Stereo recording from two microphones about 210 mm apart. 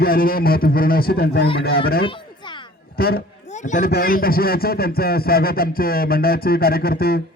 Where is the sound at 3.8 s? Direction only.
50° left (ahead or behind).